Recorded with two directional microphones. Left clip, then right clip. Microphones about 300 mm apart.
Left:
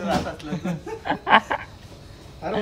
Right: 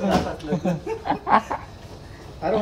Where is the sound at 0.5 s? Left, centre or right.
Centre.